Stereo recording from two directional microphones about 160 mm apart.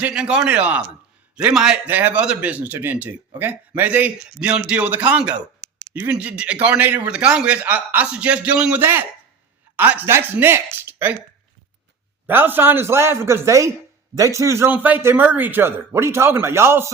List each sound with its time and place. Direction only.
0.0 s a man's voice: 5° right (ahead or behind)
12.2 s a man's voice: 10° right (ahead or behind)